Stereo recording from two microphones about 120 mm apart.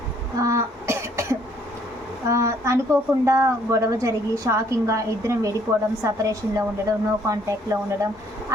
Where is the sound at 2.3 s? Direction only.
25° right (ahead or behind).